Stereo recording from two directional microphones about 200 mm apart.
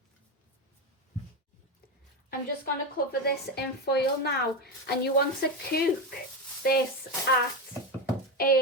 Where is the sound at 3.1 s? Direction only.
50° left (ahead or behind).